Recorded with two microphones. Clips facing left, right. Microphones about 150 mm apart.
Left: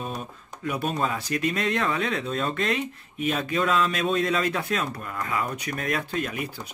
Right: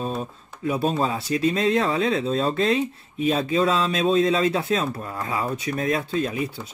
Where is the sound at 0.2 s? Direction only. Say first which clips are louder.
Right 5 dB; 30° right (ahead or behind).